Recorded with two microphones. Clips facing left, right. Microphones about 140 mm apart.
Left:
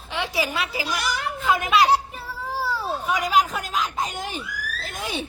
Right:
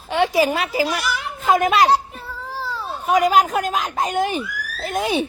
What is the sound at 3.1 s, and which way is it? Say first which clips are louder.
A man's voice: right 7 dB; 50° right (ahead or behind).